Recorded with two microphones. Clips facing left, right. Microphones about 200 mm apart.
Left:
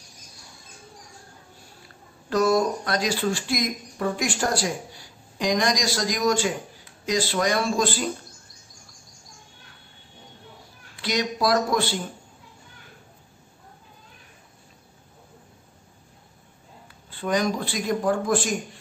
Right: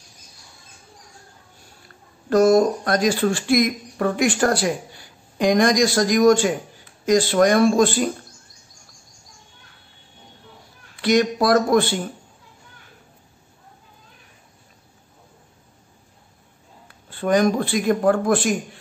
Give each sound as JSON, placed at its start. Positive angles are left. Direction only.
{"t": 2.2, "sound": "speech", "side_deg": -50}
{"t": 11.0, "sound": "speech", "side_deg": -55}
{"t": 16.8, "sound": "speech", "side_deg": -55}